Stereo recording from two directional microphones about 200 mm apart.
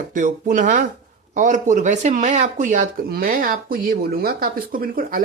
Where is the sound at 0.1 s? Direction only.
40° right (ahead or behind).